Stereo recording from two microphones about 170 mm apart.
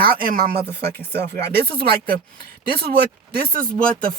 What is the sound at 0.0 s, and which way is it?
Speech, 60° right (ahead or behind).